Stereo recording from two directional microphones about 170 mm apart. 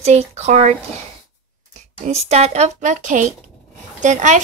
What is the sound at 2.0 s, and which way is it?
Speech, 40° right (ahead or behind).